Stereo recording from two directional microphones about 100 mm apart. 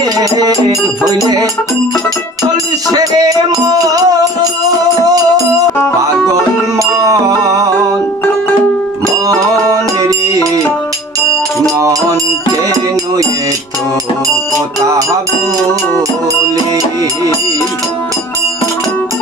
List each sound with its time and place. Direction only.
0.0 s music: 40° right (ahead or behind)
2.9 s music: 40° right (ahead or behind)
6.7 s music: 35° right (ahead or behind)
10.1 s music: 35° right (ahead or behind)
14.8 s music: 35° right (ahead or behind)